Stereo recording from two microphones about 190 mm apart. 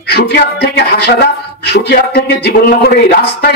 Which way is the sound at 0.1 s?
60° left (ahead or behind).